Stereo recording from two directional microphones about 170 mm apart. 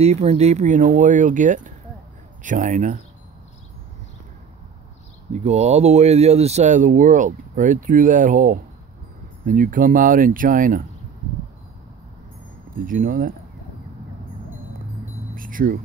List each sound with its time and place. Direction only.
0.0 s speech: 40° right (ahead or behind)
5.3 s speech: 40° right (ahead or behind)
12.7 s speech: 55° right (ahead or behind)
15.3 s a sound: 55° right (ahead or behind)